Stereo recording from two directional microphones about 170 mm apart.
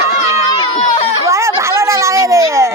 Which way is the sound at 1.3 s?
15° right (ahead or behind).